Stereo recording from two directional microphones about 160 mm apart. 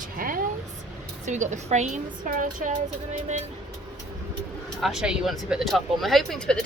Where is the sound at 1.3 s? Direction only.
50° right (ahead or behind).